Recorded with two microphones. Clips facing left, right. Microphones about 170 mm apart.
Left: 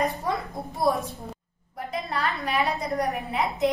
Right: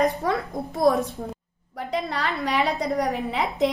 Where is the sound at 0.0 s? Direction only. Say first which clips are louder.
Right 4 dB; 80° right.